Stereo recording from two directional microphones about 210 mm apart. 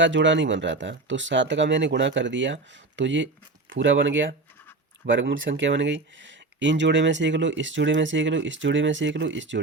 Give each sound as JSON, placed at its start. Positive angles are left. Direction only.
{"t": 0.0, "sound": "speech", "side_deg": -60}